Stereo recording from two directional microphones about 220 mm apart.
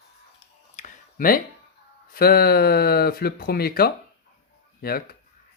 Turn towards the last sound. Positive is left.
turn(degrees=45)  # may be behind; listen again after turning